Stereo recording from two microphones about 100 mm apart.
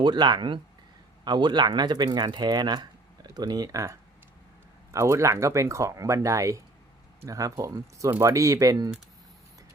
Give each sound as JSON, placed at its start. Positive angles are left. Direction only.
{"t": 0.0, "sound": "speech", "side_deg": -45}